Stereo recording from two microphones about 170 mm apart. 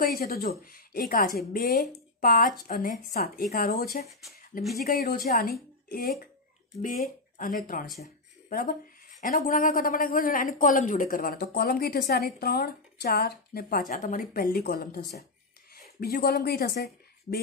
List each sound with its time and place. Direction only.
0.0 s a woman's voice: 60° left (ahead or behind)